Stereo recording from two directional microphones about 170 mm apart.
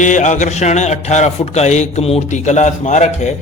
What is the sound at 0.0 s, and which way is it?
Mantra, 45° left (ahead or behind).